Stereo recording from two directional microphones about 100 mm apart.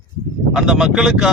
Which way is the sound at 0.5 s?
5° right (ahead or behind).